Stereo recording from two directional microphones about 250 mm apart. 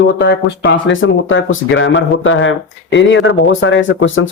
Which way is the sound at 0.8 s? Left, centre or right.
Left.